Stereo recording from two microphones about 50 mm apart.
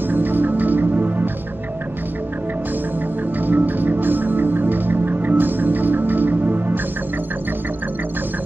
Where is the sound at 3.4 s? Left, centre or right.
Right.